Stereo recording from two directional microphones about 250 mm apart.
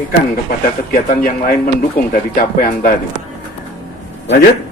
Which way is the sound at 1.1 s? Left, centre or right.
Left.